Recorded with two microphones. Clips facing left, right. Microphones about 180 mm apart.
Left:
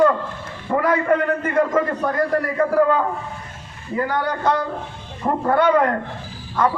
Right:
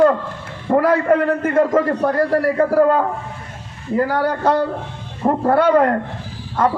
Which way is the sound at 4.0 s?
35° right (ahead or behind).